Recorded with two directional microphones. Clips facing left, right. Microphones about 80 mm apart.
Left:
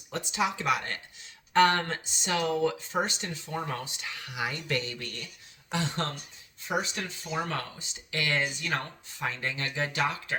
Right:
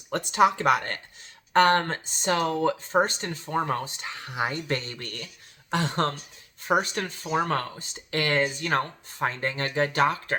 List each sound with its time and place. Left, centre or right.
0.1 s speech: right